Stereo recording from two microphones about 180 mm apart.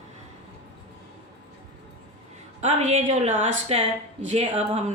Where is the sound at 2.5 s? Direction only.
40° right (ahead or behind).